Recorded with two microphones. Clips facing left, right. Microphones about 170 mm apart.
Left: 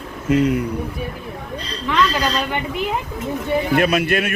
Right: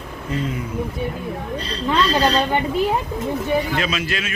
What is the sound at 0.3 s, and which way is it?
Speech, 75° left (ahead or behind).